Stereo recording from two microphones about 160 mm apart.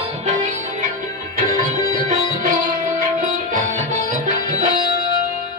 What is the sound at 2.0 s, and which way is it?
Music, 55° right (ahead or behind).